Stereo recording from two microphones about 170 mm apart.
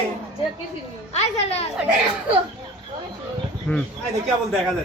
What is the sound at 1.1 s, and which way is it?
Speech, 40° left (ahead or behind).